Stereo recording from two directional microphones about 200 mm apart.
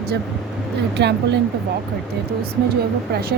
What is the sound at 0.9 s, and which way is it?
Speech, 60° right (ahead or behind).